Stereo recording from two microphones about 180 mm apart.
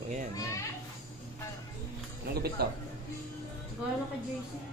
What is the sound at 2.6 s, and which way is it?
Speech, 60° right (ahead or behind).